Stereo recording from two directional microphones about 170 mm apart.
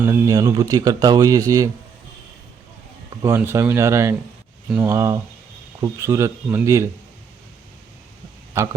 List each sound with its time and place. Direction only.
0.0 s speech: 20° right (ahead or behind)
3.2 s speech: 15° right (ahead or behind)